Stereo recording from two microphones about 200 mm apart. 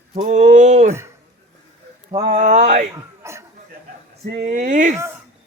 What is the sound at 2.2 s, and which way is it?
Speech, 35° right (ahead or behind).